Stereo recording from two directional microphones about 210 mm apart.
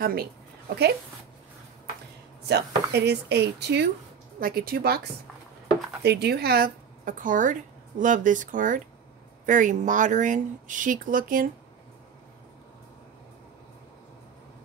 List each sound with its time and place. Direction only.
0.0 s a woman's voice: 45° right (ahead or behind)
2.4 s a woman's voice: 50° right (ahead or behind)
6.0 s a woman's voice: 50° right (ahead or behind)